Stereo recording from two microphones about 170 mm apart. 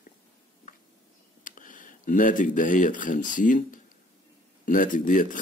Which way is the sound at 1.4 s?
50° left (ahead or behind).